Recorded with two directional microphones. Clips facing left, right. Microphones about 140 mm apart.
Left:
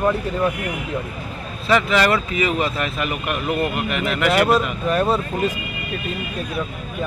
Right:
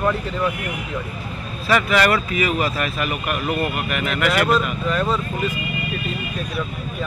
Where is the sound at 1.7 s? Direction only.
25° left (ahead or behind).